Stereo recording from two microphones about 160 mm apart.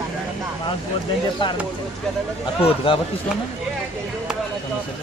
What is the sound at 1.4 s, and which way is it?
Speech, 30° left (ahead or behind).